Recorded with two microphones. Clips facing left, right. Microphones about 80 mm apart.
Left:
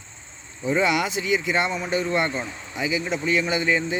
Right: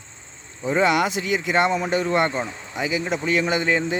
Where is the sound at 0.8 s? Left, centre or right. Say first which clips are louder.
Right 4 dB; right.